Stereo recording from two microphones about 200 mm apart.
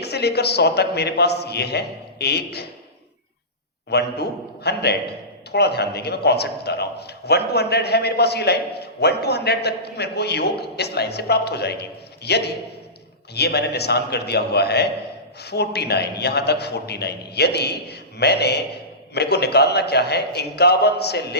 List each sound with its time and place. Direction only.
0.0 s a man's voice: 55° left (ahead or behind)
3.8 s a man's voice: 55° left (ahead or behind)